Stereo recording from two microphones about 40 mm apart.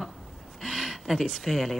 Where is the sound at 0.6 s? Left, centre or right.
Centre.